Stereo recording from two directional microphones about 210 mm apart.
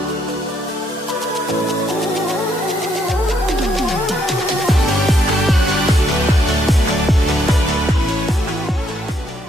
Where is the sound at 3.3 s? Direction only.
Centre (ahead or behind).